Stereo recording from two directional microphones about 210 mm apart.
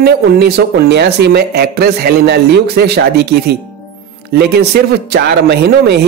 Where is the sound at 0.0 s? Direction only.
50° right (ahead or behind).